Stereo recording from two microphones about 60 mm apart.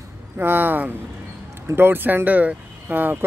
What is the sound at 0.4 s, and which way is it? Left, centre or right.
Speech, right.